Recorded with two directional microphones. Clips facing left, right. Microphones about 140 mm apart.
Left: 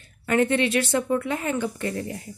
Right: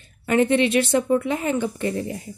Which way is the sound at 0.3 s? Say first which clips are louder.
Right 3 dB; 20° right (ahead or behind).